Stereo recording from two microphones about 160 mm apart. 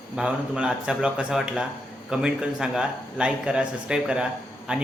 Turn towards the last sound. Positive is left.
turn(degrees=-5)  # may be behind; listen again after turning